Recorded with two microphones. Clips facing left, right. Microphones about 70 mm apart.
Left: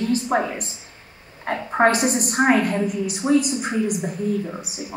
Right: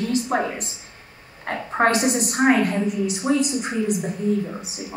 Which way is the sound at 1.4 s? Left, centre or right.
Centre.